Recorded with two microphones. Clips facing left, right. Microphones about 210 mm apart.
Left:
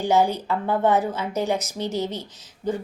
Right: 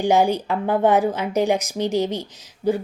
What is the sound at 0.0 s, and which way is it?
A woman's voice, 15° right (ahead or behind).